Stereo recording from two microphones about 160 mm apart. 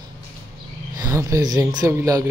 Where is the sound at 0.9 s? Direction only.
20° right (ahead or behind).